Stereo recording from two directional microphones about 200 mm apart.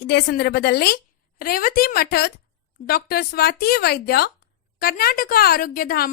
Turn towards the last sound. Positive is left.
turn(degrees=50)  # may be behind; listen again after turning